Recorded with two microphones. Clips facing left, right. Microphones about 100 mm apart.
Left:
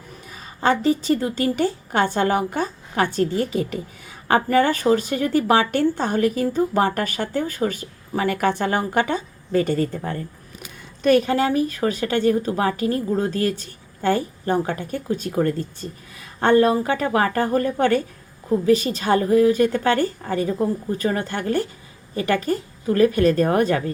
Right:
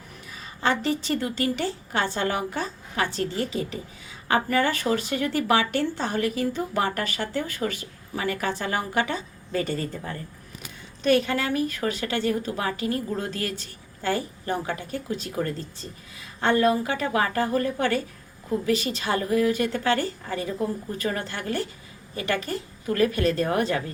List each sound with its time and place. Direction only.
0.3 s a sound: 40° left (ahead or behind)
1.0 s a woman's voice: 40° left (ahead or behind)
11.0 s a woman's voice: 40° left (ahead or behind)
16.6 s a woman's voice: 35° left (ahead or behind)